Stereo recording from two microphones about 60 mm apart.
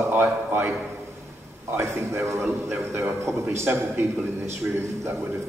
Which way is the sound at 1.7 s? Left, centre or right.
Right.